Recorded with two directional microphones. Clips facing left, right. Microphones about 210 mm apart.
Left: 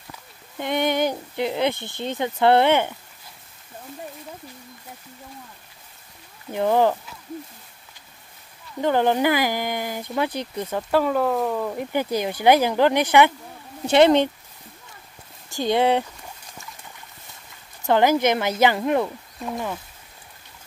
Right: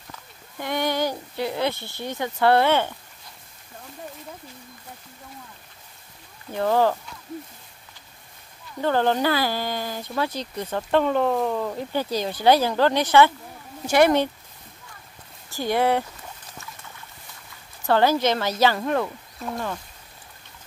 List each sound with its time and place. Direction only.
0.6 s a sound: 20° left (ahead or behind)
1.1 s speech: 20° left (ahead or behind)
6.5 s speech: 15° left (ahead or behind)
8.8 s speech: 15° left (ahead or behind)
11.7 s speech: 15° left (ahead or behind)
15.5 s speech: 20° left (ahead or behind)
17.8 s speech: 15° left (ahead or behind)
19.4 s speech: 5° left (ahead or behind)